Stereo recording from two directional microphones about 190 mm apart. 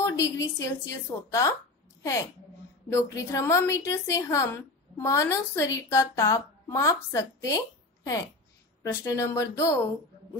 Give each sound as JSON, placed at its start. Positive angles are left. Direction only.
{"t": 0.0, "sound": "a woman's voice", "side_deg": 15}
{"t": 2.9, "sound": "a woman's voice", "side_deg": 15}